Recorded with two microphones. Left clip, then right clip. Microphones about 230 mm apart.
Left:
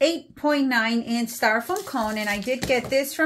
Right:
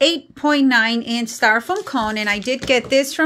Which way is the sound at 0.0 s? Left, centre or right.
Right.